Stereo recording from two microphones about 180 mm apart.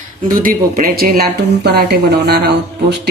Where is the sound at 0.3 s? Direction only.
50° right (ahead or behind).